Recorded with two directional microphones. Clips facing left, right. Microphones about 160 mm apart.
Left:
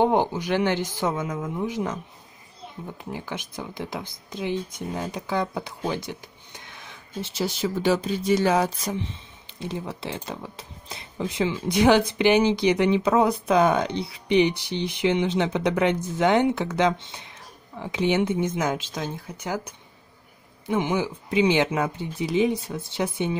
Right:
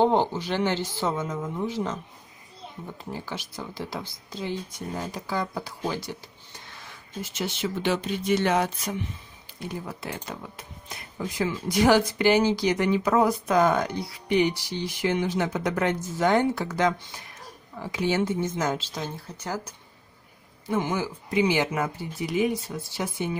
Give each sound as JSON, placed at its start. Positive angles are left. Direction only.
{"t": 0.0, "sound": "speech", "side_deg": 15}
{"t": 3.0, "sound": "speech", "side_deg": 15}
{"t": 20.6, "sound": "speech", "side_deg": 20}